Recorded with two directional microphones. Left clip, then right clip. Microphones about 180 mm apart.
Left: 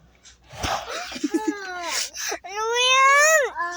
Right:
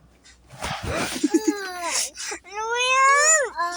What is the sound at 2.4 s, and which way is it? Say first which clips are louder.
Baby cry: left 2 dB; 15° left (ahead or behind).